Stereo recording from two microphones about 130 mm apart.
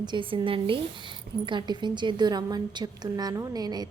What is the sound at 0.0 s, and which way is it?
A woman's voice, 40° right (ahead or behind).